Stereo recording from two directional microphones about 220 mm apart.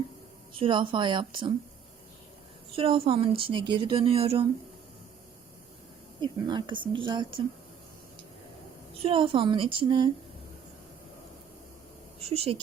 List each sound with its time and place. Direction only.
0.6 s speech: 20° right (ahead or behind)
2.7 s speech: 25° right (ahead or behind)
6.1 s speech: 20° right (ahead or behind)
9.0 s speech: 25° right (ahead or behind)
12.2 s speech: 25° right (ahead or behind)